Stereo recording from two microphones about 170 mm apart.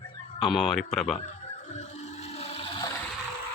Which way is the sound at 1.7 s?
40° left (ahead or behind).